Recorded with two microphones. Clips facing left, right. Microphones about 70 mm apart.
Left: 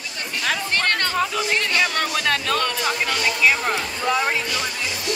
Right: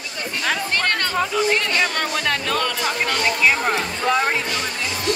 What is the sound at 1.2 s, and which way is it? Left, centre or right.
Speech, centre.